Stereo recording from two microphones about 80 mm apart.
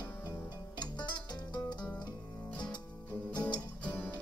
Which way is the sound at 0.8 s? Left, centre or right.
Left.